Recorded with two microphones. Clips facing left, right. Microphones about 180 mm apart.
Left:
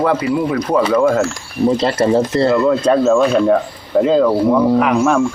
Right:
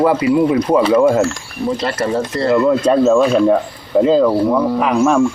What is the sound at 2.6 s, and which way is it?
Speech, centre (ahead or behind).